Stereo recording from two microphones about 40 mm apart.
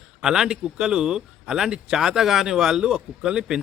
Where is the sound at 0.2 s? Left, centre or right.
Centre.